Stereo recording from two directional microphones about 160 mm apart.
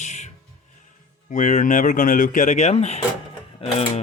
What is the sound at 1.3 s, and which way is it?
Speech, 50° left (ahead or behind).